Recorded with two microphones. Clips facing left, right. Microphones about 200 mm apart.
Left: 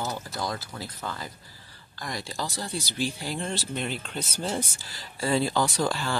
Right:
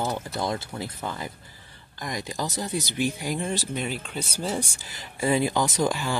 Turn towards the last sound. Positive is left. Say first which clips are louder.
# right 2 dB
turn(degrees=-15)  # may be behind; listen again after turning